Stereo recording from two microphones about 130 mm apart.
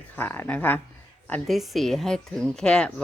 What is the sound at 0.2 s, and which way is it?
Speech, 15° left (ahead or behind).